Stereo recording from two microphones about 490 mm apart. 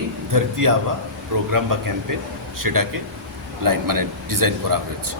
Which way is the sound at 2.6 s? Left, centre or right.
Right.